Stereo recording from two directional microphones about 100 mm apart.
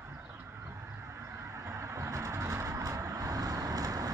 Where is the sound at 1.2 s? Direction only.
30° right (ahead or behind).